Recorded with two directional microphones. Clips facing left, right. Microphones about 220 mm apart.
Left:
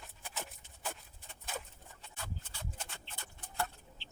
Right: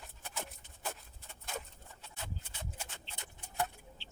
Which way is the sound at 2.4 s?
15° right (ahead or behind).